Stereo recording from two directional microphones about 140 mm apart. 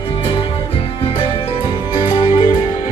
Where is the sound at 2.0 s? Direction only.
40° left (ahead or behind).